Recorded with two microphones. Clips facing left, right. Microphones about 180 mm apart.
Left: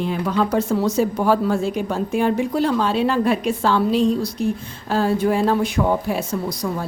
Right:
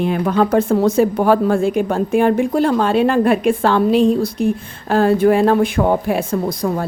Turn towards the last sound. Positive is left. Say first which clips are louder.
# right 5 dB
turn(degrees=-55)  # may be behind; listen again after turning